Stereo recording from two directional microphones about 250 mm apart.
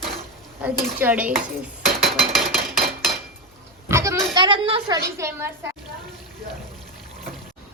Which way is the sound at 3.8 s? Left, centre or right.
Centre.